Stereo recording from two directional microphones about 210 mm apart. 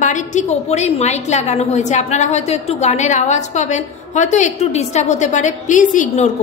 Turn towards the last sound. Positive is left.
turn(degrees=35)  # may be behind; listen again after turning